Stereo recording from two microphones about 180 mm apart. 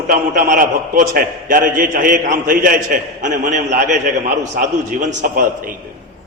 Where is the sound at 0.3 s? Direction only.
50° right (ahead or behind).